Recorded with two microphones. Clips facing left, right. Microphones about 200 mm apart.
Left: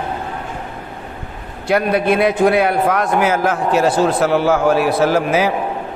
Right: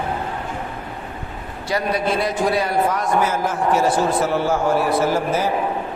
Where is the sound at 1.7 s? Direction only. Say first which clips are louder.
Left 6 dB; 60° left (ahead or behind); by 5.5 s 85° left.